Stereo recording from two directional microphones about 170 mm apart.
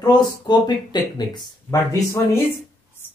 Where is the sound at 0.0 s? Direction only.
25° left (ahead or behind).